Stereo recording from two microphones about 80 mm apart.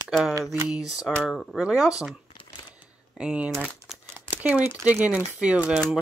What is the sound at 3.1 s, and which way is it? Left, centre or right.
Speech, centre.